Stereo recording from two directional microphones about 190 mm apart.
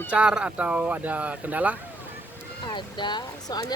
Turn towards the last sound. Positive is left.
turn(degrees=25)  # may be behind; listen again after turning